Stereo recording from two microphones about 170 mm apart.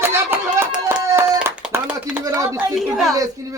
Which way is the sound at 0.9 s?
15° right (ahead or behind).